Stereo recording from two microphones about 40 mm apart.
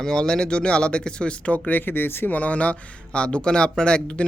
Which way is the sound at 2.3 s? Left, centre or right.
Left.